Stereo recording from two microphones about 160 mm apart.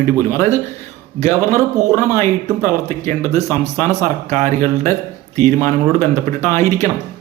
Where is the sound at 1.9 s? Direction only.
20° left (ahead or behind).